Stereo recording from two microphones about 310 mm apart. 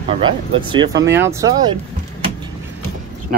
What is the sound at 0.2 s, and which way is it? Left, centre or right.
Speech, centre.